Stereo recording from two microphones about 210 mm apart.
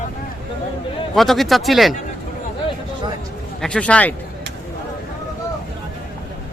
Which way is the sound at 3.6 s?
5° left (ahead or behind).